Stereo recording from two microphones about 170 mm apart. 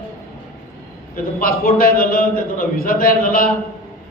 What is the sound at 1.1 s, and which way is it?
A man's voice, 55° left (ahead or behind).